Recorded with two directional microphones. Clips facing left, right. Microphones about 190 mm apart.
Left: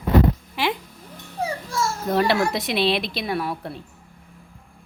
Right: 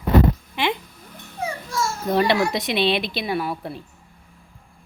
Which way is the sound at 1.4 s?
35° left (ahead or behind).